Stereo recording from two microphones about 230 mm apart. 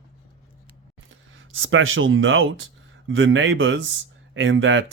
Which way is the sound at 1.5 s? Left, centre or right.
Right.